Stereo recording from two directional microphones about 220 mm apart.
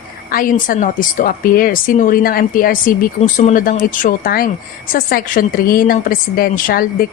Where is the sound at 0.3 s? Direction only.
40° left (ahead or behind).